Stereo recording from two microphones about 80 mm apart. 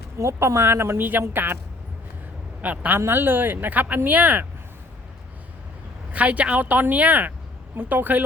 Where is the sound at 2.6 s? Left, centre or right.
Right.